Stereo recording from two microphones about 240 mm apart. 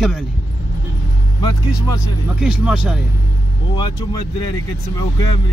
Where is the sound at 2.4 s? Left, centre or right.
Centre.